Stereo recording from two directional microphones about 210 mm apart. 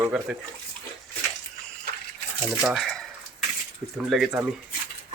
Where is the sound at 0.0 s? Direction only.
5° right (ahead or behind).